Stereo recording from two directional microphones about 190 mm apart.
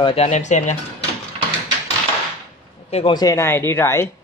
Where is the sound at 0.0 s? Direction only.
30° left (ahead or behind).